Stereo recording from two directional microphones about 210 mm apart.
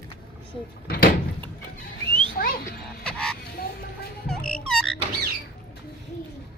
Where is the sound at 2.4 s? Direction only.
45° left (ahead or behind).